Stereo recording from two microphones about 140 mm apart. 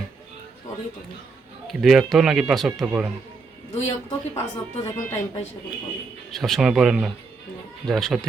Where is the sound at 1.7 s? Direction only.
Centre (ahead or behind).